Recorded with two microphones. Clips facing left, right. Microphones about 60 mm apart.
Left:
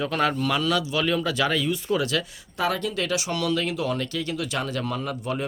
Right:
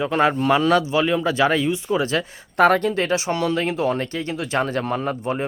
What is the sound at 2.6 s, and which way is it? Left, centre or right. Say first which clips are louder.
Speech: right 9 dB; right.